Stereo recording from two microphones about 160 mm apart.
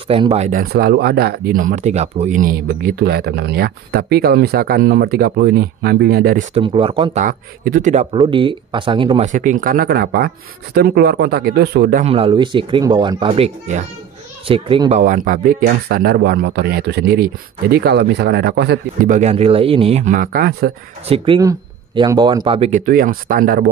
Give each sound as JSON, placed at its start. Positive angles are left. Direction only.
{"t": 0.1, "sound": "speech", "side_deg": -40}
{"t": 0.6, "sound": "speech", "side_deg": -75}
{"t": 6.5, "sound": "speech", "side_deg": -35}
{"t": 7.2, "sound": "speech", "side_deg": -60}
{"t": 7.9, "sound": "speech", "side_deg": -35}
{"t": 9.2, "sound": "speech", "side_deg": -55}
{"t": 12.0, "sound": "speech", "side_deg": -35}
{"t": 15.0, "sound": "speech", "side_deg": -55}
{"t": 19.0, "sound": "speech", "side_deg": -45}
{"t": 20.2, "sound": "speech", "side_deg": -70}
{"t": 21.4, "sound": "speech", "side_deg": -25}
{"t": 22.6, "sound": "speech", "side_deg": -50}